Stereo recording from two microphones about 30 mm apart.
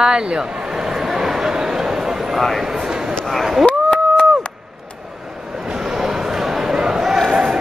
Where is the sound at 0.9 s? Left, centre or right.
Centre.